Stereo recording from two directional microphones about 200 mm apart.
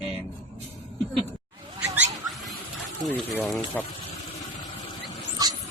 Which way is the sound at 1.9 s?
Centre (ahead or behind).